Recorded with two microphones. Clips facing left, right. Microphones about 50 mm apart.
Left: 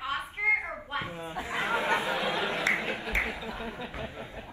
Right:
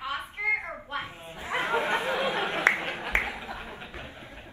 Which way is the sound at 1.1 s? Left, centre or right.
Left.